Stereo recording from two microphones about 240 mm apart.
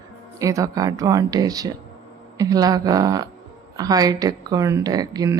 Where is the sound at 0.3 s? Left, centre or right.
Centre.